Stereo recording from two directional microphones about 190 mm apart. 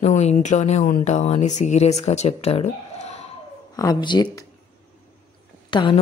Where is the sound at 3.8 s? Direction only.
20° left (ahead or behind).